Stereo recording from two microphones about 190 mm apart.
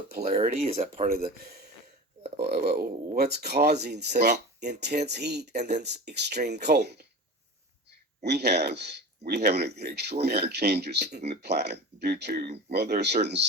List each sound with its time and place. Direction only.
0.2 s speech: 40° right (ahead or behind)
1.0 s speech: 50° right (ahead or behind)
8.2 s speech: 60° right (ahead or behind)